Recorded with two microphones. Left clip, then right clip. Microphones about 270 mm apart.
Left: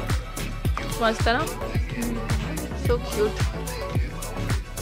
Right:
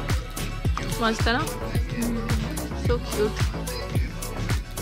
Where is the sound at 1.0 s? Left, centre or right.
Centre.